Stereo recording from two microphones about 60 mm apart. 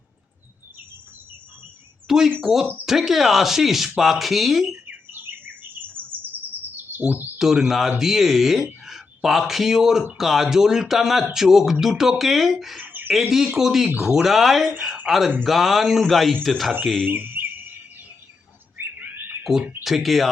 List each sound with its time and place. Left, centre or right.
2.0 s bird: centre
2.4 s speech: centre
4.9 s bird: right
6.3 s chirp: right
7.0 s speech: right
7.3 s speech: centre
12.8 s bird: right
13.3 s speech: centre
17.1 s bird: right
18.8 s a sound: right
19.8 s speech: centre